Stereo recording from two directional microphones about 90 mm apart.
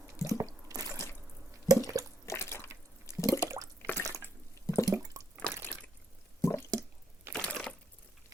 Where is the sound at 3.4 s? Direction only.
35° right (ahead or behind).